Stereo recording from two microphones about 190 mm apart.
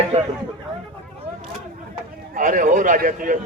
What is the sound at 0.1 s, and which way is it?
Speech, 30° right (ahead or behind).